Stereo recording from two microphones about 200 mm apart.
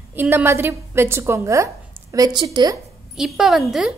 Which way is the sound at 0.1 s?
10° right (ahead or behind).